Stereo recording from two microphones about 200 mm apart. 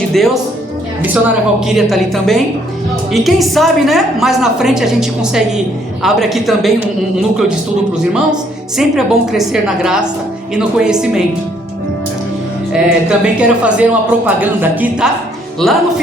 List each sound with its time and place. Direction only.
0.1 s a woman's voice: centre (ahead or behind)
12.7 s a woman's voice: 5° right (ahead or behind)
15.6 s a woman's voice: centre (ahead or behind)